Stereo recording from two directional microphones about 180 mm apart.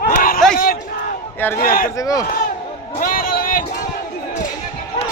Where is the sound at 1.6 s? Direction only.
50° left (ahead or behind).